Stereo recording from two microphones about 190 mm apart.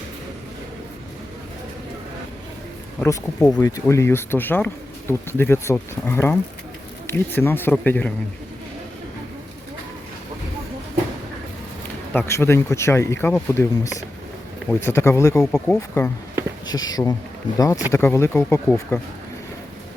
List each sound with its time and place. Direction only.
3.0 s speech: 15° left (ahead or behind)
12.1 s speech: 15° left (ahead or behind)
16.6 s speech: 20° left (ahead or behind)